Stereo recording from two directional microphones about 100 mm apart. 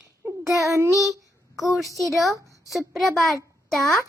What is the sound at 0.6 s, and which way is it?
Child singing, 30° right (ahead or behind).